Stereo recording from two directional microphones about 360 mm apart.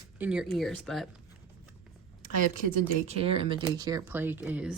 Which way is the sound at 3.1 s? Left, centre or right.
Centre.